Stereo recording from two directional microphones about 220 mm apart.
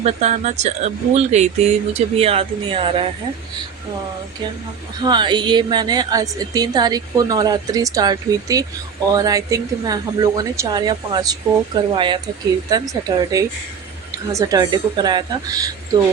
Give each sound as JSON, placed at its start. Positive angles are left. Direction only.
{"t": 0.0, "sound": "speech", "side_deg": -30}
{"t": 5.0, "sound": "a woman's voice", "side_deg": -20}